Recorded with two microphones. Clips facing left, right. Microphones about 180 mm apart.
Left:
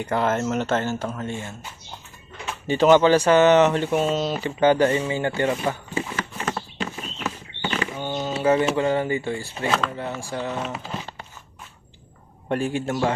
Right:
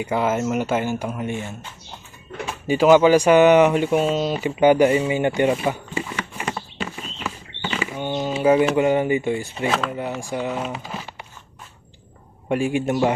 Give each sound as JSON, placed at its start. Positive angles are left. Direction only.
{"t": 0.0, "sound": "speech", "side_deg": -5}
{"t": 6.3, "sound": "a sound", "side_deg": -10}
{"t": 8.7, "sound": "speech", "side_deg": -15}
{"t": 12.4, "sound": "speech", "side_deg": -10}